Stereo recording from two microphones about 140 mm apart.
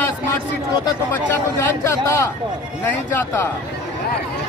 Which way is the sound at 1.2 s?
20° left (ahead or behind).